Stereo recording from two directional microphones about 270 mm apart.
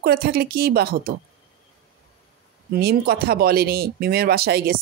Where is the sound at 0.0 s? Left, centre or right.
Right.